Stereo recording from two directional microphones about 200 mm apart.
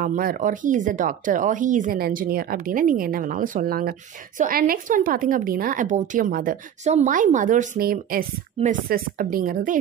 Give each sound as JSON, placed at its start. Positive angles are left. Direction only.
{"t": 0.0, "sound": "a woman's voice", "side_deg": -45}